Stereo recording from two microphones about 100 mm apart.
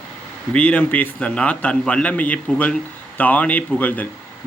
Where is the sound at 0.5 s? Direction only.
15° left (ahead or behind).